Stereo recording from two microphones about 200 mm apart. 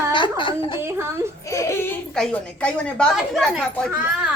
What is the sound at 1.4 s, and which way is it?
Speech, 15° left (ahead or behind).